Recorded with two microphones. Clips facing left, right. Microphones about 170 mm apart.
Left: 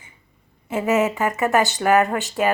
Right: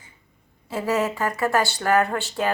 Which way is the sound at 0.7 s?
20° left (ahead or behind).